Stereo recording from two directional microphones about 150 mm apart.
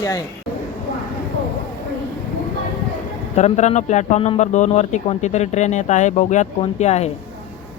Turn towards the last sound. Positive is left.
turn(degrees=45)  # may be behind; listen again after turning